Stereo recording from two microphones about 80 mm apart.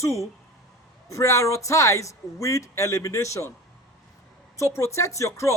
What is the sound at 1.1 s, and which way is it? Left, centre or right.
Speech, left.